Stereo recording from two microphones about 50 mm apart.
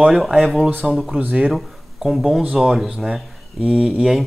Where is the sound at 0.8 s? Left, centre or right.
Centre.